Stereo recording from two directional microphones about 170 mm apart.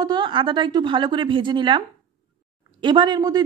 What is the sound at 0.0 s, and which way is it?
A woman's voice, 25° right (ahead or behind).